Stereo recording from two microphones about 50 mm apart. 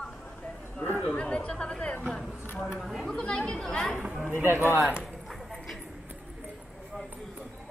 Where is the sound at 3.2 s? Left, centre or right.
Centre.